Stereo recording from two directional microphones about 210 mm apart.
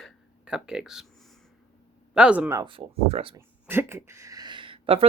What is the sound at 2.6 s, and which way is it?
Speech, 25° right (ahead or behind).